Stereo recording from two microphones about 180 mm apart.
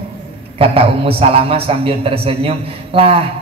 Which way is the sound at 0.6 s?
30° right (ahead or behind).